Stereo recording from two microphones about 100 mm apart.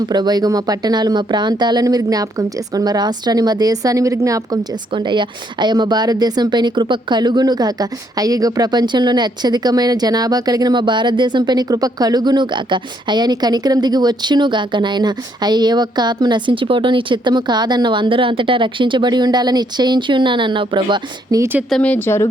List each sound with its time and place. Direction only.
0.1 s speech: 45° right (ahead or behind)
4.9 s speech: 50° right (ahead or behind)
21.3 s speech: 40° right (ahead or behind)
21.8 s speech: 15° left (ahead or behind)